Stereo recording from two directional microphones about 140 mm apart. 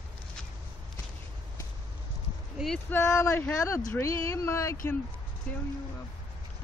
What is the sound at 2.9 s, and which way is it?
Speech, 20° left (ahead or behind).